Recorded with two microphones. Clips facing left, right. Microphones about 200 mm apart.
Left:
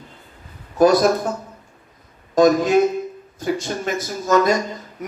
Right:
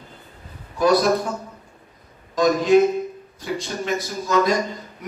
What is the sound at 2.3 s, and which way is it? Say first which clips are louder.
Speech: left 2 dB; 45° left (ahead or behind).